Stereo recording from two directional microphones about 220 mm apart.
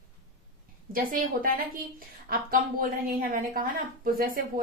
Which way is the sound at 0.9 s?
40° right (ahead or behind).